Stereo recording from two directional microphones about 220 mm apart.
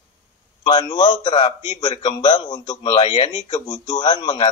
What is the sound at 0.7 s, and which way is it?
A man's voice, 20° left (ahead or behind).